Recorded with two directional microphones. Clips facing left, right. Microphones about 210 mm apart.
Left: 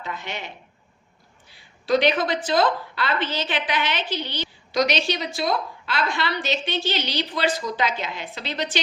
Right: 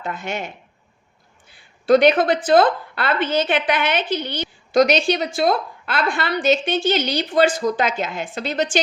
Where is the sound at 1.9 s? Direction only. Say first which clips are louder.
Right 6 dB; 55° right (ahead or behind).